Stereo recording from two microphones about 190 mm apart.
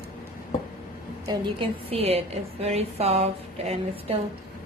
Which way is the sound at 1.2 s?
30° right (ahead or behind).